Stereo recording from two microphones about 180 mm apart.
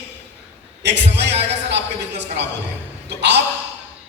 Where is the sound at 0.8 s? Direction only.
70° right (ahead or behind).